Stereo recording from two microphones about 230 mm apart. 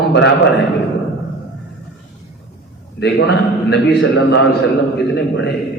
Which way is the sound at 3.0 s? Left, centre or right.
Left.